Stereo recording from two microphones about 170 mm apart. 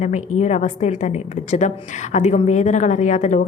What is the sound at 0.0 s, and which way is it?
A woman's voice, 45° left (ahead or behind).